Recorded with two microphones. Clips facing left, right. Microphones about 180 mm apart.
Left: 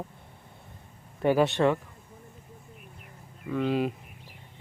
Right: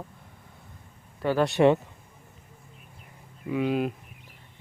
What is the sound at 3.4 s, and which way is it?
Speech, 10° right (ahead or behind).